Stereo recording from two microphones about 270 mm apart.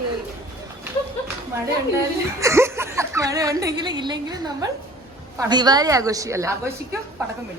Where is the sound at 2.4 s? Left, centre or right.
Centre.